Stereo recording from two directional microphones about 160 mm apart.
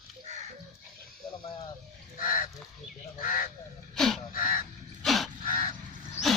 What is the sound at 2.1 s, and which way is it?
Crow, 60° left (ahead or behind).